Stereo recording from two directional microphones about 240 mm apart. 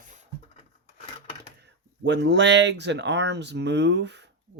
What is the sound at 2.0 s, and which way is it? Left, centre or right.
Speech, right.